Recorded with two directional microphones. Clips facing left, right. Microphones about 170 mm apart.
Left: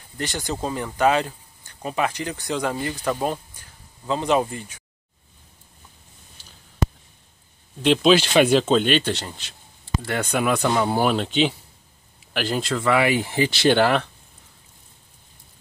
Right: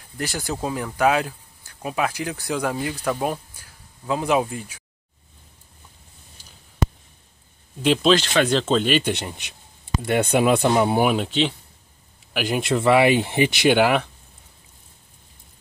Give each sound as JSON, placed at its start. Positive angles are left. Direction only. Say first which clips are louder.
{"t": 0.2, "sound": "speech", "louder": "even", "side_deg": -5}
{"t": 7.8, "sound": "speech", "louder": "left 1 dB", "side_deg": -5}
{"t": 8.1, "sound": "speech", "louder": "left 4 dB", "side_deg": 15}
{"t": 9.1, "sound": "speech", "louder": "right 1 dB", "side_deg": -15}
{"t": 12.4, "sound": "speech", "louder": "right 2 dB", "side_deg": -15}